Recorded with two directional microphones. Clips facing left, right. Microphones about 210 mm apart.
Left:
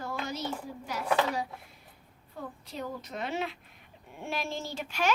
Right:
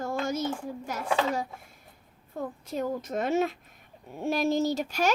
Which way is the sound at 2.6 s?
45° right (ahead or behind).